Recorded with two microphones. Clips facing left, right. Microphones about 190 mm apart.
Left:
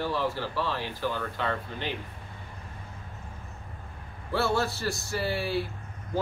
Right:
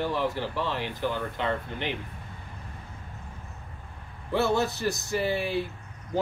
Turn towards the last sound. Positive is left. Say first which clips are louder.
# right 2 dB
turn(degrees=-20)  # may be behind; listen again after turning